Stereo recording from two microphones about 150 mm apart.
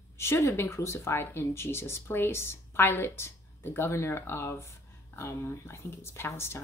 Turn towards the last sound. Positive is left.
turn(degrees=15)  # may be behind; listen again after turning